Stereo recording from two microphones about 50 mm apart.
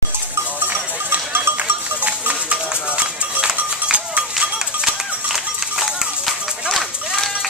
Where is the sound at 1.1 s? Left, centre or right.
Right.